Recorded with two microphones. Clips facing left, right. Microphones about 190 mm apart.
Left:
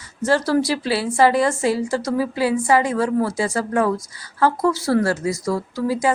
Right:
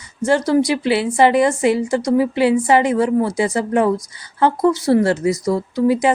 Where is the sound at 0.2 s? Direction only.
15° right (ahead or behind).